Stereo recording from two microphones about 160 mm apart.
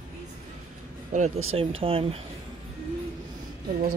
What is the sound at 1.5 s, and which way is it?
Speech, 35° right (ahead or behind).